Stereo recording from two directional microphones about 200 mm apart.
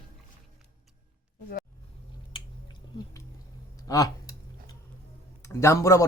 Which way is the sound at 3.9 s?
20° left (ahead or behind).